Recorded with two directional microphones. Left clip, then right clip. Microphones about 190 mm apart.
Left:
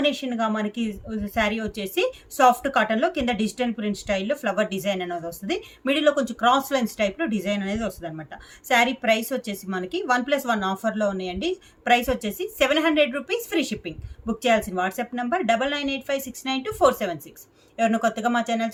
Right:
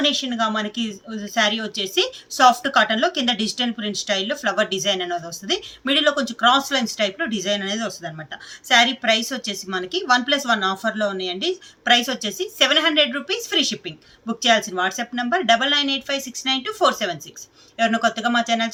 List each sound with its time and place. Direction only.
0.0 s a woman's voice: 60° left (ahead or behind)